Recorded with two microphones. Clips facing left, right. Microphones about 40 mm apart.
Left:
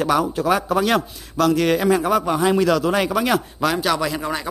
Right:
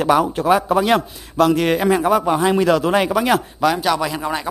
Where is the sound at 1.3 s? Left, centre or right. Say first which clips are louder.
Right 2 dB; right.